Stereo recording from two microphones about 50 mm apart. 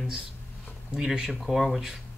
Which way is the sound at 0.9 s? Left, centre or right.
Centre.